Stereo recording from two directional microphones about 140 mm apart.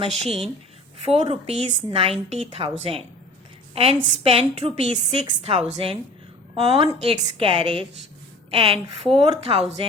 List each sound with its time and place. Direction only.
0.0 s a woman's voice: 45° right (ahead or behind)